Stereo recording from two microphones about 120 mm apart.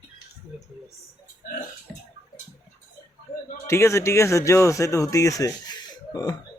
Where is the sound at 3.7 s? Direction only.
25° left (ahead or behind).